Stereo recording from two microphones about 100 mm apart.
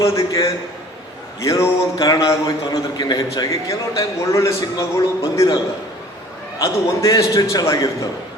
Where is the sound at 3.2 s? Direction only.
30° left (ahead or behind).